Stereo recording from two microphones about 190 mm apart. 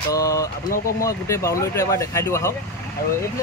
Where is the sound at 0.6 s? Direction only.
45° left (ahead or behind).